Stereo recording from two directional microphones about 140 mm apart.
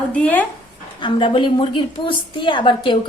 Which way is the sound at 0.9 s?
35° left (ahead or behind).